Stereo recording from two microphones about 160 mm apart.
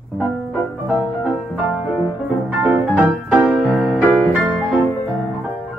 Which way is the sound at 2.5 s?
10° right (ahead or behind).